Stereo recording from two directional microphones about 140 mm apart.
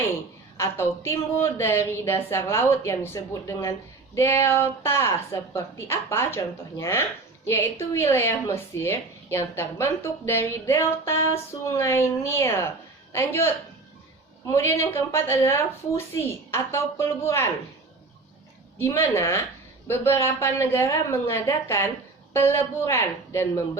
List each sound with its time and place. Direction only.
0.5 s a woman's voice: 20° left (ahead or behind)
14.5 s speech: 20° left (ahead or behind)
18.8 s a woman's voice: 20° left (ahead or behind)